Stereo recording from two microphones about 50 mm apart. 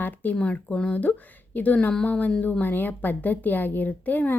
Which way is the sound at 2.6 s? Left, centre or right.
Left.